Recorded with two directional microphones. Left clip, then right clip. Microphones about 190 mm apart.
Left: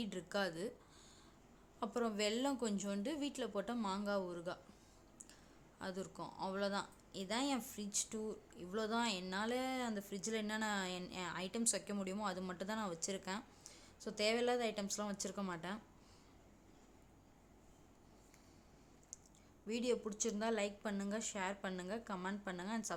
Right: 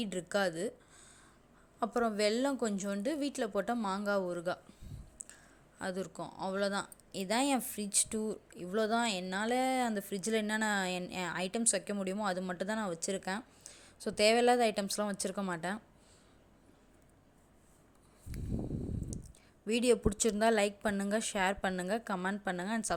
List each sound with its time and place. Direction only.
0.0 s a woman's voice: 25° right (ahead or behind)
1.8 s a woman's voice: 25° right (ahead or behind)
5.8 s a woman's voice: 25° right (ahead or behind)
19.6 s a woman's voice: 30° right (ahead or behind)